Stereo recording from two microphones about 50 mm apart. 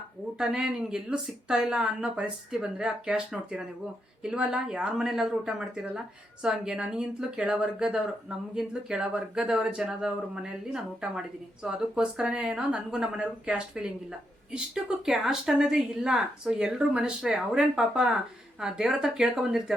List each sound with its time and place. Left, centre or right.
0.3 s a woman's voice: centre